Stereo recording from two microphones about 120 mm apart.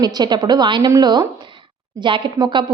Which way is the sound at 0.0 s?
35° right (ahead or behind).